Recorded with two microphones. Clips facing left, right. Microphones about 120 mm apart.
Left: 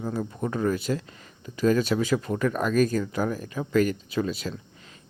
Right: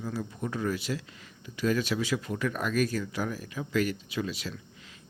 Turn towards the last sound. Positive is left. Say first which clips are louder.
# left 6 dB
turn(degrees=45)  # may be behind; listen again after turning